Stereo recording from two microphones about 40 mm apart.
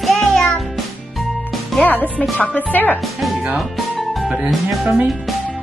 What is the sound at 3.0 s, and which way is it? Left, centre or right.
Speech, centre.